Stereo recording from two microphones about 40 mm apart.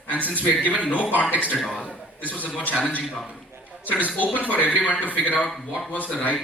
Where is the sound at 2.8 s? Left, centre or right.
Left.